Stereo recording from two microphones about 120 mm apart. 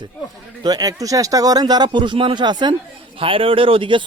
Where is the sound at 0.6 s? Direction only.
30° right (ahead or behind).